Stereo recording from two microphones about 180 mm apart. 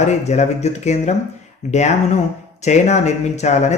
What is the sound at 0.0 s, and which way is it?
Speech, 40° left (ahead or behind).